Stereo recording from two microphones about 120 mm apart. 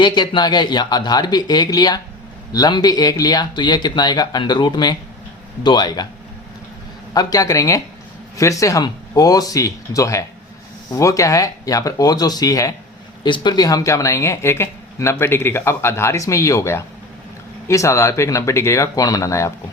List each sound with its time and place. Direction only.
0.0 s speech: 40° left (ahead or behind)
7.1 s speech: 30° left (ahead or behind)
13.2 s speech: 40° left (ahead or behind)